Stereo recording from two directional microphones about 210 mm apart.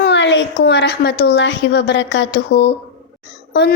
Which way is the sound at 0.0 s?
55° left (ahead or behind).